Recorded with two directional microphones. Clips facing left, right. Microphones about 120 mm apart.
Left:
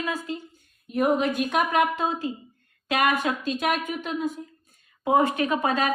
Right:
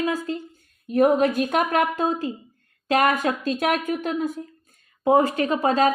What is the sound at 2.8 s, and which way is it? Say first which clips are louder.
Speech: right 4 dB; 40° right (ahead or behind).